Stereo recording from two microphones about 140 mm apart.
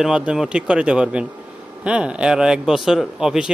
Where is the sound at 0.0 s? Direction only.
5° right (ahead or behind).